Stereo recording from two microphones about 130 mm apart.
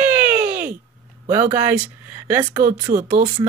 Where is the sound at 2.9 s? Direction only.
90° right.